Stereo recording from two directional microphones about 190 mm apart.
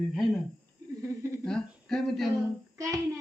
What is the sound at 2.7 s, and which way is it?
Child singing, 15° right (ahead or behind).